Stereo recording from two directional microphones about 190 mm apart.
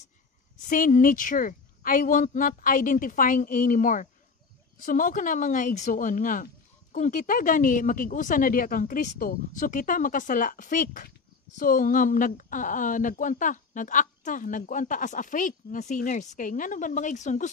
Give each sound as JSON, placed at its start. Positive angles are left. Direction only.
{"t": 0.7, "sound": "speech", "side_deg": 45}